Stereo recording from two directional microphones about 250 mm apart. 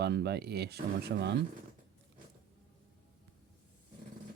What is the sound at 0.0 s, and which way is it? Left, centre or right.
Speech, right.